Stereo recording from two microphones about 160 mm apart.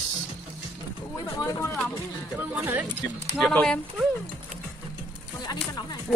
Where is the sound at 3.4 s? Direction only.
5° left (ahead or behind).